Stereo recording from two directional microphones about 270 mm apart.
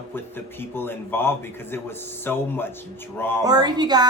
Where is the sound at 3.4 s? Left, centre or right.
Centre.